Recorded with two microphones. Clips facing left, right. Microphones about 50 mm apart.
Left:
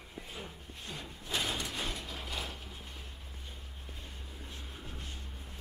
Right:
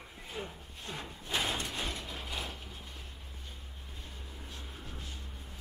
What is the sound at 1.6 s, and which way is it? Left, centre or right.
Mechanisms, centre.